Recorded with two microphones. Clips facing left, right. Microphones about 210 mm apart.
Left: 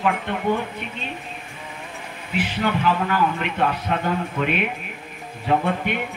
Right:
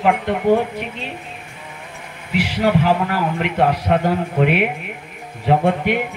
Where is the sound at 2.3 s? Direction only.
75° right (ahead or behind).